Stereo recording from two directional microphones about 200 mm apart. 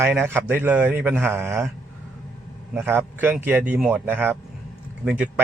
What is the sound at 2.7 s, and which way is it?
A man's voice, 10° right (ahead or behind).